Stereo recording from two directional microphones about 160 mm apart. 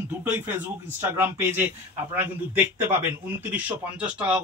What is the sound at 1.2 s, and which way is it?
A man's voice, 15° right (ahead or behind).